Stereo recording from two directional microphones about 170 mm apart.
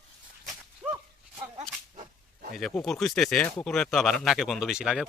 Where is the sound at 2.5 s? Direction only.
Centre (ahead or behind).